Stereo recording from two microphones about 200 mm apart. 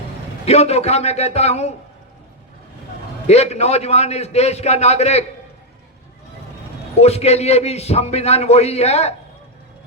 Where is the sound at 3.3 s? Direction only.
30° left (ahead or behind).